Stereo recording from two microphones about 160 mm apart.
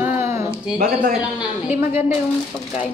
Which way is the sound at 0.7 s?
65° right (ahead or behind).